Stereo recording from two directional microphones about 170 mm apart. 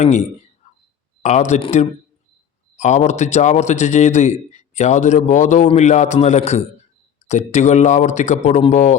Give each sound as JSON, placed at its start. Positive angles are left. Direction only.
{"t": 0.0, "sound": "a man's voice", "side_deg": 40}